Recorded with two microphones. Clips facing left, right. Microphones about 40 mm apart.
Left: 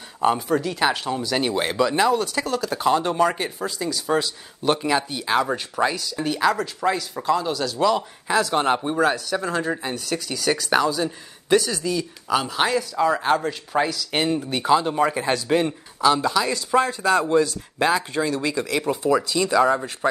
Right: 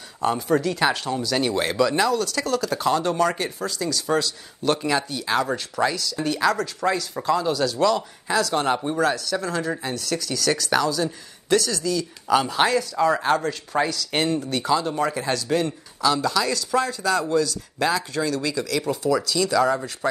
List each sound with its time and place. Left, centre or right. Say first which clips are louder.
0.2 s speech: left 1 dB; centre
7.9 s speech: left 1 dB; centre
12.3 s speech: right 2 dB; centre; by 19.8 s left